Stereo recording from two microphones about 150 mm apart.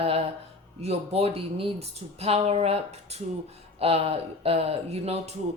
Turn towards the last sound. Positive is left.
turn(degrees=-45)  # may be behind; listen again after turning